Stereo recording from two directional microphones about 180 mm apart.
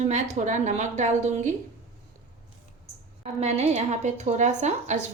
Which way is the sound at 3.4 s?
35° right (ahead or behind).